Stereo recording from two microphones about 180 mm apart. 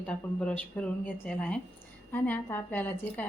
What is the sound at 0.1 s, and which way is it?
A woman's voice, 5° left (ahead or behind).